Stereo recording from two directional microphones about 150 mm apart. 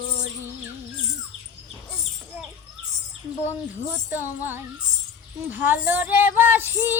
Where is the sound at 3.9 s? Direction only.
15° right (ahead or behind).